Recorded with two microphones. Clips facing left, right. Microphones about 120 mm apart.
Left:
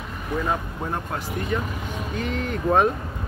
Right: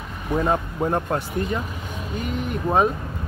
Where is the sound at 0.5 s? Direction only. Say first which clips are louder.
Right 5 dB; 35° right (ahead or behind).